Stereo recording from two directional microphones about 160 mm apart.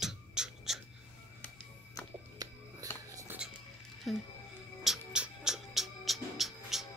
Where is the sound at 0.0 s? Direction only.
5° right (ahead or behind).